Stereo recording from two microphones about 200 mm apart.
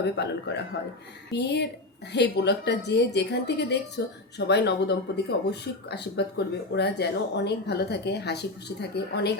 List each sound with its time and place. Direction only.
0.0 s a woman's voice: 60° left (ahead or behind)